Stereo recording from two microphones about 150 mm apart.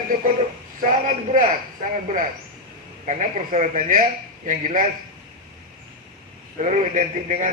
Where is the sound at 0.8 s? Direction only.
65° right (ahead or behind).